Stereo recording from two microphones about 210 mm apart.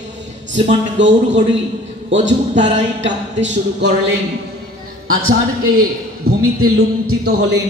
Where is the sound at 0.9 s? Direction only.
60° right (ahead or behind).